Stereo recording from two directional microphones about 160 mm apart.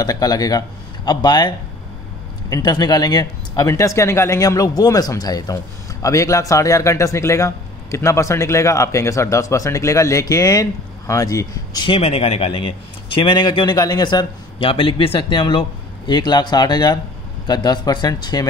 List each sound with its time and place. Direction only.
0.0 s speech: 25° left (ahead or behind)
2.5 s speech: 25° left (ahead or behind)